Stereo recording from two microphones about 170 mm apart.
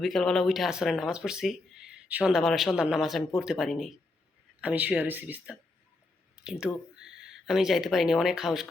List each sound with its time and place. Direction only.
0.0 s speech: centre (ahead or behind)